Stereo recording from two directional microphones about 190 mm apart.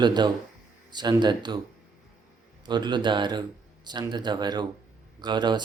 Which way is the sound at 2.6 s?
20° right (ahead or behind).